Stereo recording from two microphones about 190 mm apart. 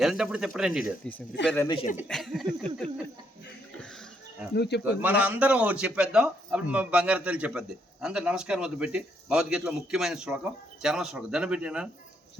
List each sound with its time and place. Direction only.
0.0 s speech: 5° right (ahead or behind)
1.6 s speech: 25° left (ahead or behind)
2.0 s speech: centre (ahead or behind)
4.5 s speech: 60° left (ahead or behind)
4.8 s a man's voice: 10° right (ahead or behind)